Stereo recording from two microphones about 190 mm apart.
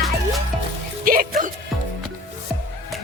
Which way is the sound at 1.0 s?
50° right (ahead or behind).